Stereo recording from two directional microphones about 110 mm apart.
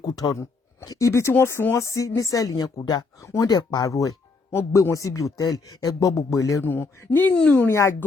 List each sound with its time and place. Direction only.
0.0 s a woman's voice: 35° left (ahead or behind)
6.7 s speech: 15° left (ahead or behind)
7.7 s speech: 25° left (ahead or behind)